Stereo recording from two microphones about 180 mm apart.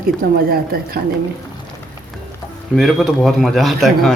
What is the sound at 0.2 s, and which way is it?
Speech, 60° right (ahead or behind).